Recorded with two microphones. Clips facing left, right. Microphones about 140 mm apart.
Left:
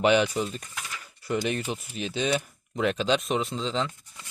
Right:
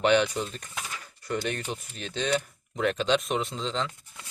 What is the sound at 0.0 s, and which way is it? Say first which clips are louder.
Speech: left 1 dB; 10° left (ahead or behind).